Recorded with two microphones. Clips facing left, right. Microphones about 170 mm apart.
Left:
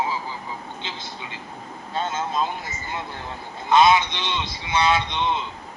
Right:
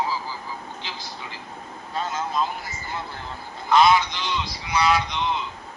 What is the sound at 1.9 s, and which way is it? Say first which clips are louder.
A man's voice: left 1 dB; 25° left (ahead or behind).